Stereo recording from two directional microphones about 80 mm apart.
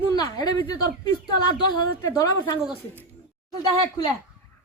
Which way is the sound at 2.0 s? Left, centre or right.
Left.